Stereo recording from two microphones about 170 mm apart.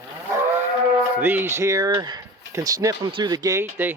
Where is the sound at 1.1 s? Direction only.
10° right (ahead or behind).